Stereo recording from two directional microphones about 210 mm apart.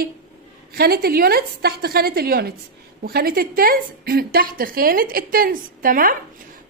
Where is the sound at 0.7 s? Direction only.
45° right (ahead or behind).